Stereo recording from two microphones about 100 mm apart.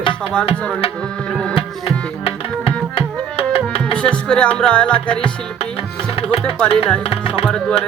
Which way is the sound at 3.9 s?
10° left (ahead or behind).